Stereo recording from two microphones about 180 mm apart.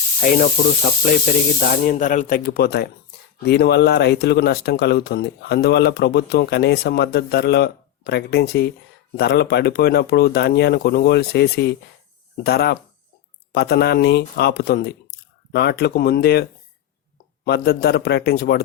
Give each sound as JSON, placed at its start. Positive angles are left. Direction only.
{"t": 0.2, "sound": "speech", "side_deg": 50}